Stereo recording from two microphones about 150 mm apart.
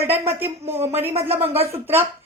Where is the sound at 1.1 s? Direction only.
40° right (ahead or behind).